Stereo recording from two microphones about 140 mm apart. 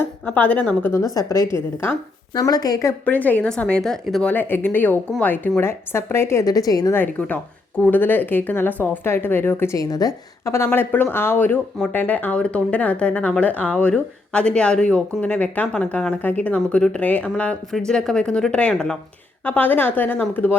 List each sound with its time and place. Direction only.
0.0 s speech: 10° left (ahead or behind)
3.1 s speech: 10° left (ahead or behind)
6.9 s speech: 15° left (ahead or behind)